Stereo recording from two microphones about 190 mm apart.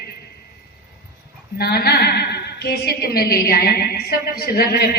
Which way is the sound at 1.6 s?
55° left (ahead or behind).